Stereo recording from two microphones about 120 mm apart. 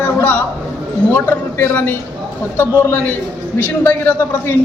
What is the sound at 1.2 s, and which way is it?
A woman's voice, 15° left (ahead or behind).